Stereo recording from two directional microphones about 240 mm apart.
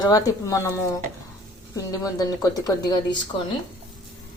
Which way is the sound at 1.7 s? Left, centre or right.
Centre.